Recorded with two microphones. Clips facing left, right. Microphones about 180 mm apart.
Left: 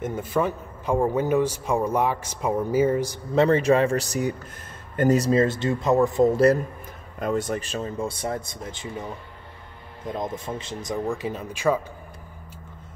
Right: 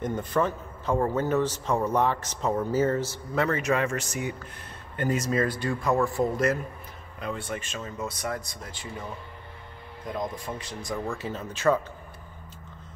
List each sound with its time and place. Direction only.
0.0 s speech: 5° left (ahead or behind)
3.3 s speech: 30° left (ahead or behind)
7.2 s speech: 45° left (ahead or behind); by 11.8 s 10° left (ahead or behind)